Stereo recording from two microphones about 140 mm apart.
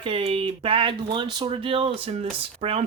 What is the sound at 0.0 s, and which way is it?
Speech, 40° right (ahead or behind).